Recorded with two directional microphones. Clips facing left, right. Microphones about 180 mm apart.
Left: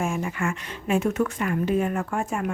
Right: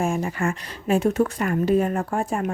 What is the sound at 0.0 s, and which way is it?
Speech, 35° right (ahead or behind).